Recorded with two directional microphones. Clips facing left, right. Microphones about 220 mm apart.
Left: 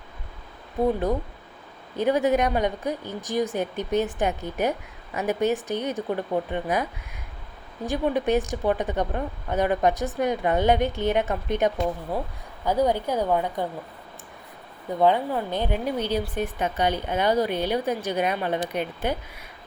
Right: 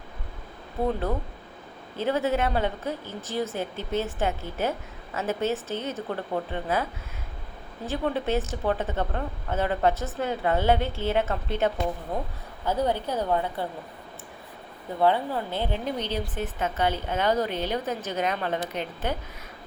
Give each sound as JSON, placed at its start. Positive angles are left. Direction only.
{"t": 0.9, "sound": "speech", "side_deg": 15}
{"t": 7.9, "sound": "speech", "side_deg": 15}
{"t": 15.0, "sound": "speech", "side_deg": 15}